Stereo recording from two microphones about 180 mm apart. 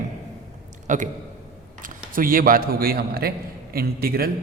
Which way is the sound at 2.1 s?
50° right (ahead or behind).